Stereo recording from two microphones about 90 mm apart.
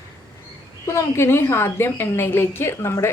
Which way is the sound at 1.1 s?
30° left (ahead or behind).